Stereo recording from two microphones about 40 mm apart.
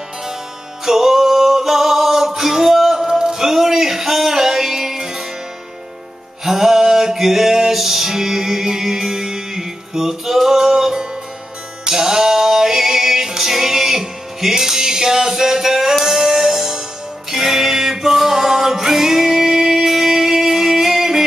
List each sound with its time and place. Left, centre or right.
0.8 s singing: centre
6.4 s music: centre